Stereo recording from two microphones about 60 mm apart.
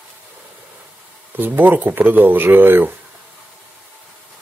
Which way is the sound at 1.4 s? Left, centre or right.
Right.